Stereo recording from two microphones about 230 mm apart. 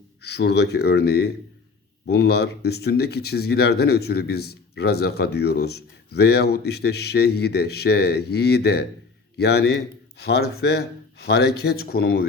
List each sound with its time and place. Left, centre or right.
0.2 s speech: left